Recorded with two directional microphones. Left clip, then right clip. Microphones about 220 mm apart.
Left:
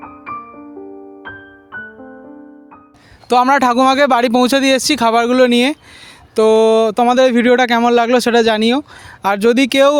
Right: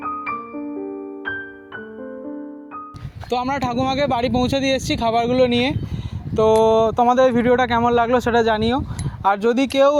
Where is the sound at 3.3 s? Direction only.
50° left (ahead or behind).